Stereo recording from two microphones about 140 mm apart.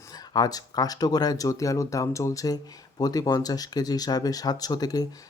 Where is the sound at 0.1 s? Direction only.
25° left (ahead or behind).